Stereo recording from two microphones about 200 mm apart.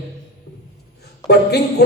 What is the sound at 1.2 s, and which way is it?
Speech, 55° left (ahead or behind).